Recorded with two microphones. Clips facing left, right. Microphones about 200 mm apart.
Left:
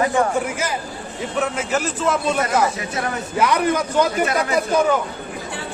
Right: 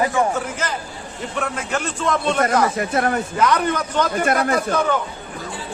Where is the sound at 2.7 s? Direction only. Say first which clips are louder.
Right 5 dB; 50° right (ahead or behind).